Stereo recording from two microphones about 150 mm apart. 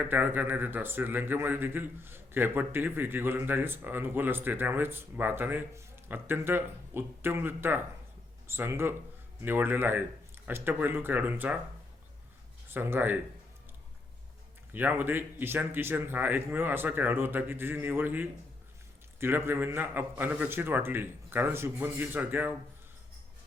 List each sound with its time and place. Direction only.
0.0 s a man's voice: 10° right (ahead or behind)
12.7 s a man's voice: 15° right (ahead or behind)
14.7 s a man's voice: 10° right (ahead or behind)